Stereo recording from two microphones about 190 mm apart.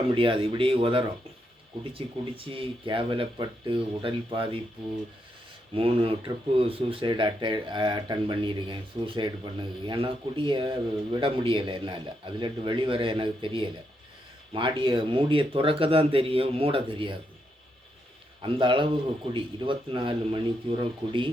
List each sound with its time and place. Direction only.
0.1 s speech: 25° right (ahead or behind)
5.7 s speech: 30° right (ahead or behind)
18.4 s speech: 25° right (ahead or behind)